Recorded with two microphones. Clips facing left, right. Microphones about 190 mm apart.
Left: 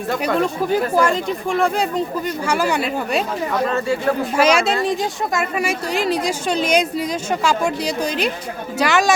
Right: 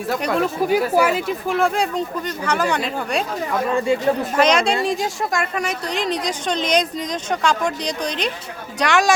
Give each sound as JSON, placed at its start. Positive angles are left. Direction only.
{"t": 0.1, "sound": "speech", "side_deg": 0}
{"t": 3.7, "sound": "speech", "side_deg": -15}
{"t": 4.4, "sound": "speech", "side_deg": 5}